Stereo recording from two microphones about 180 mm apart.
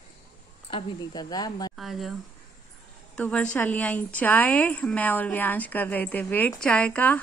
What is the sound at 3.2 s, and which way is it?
A woman's voice, 5° left (ahead or behind).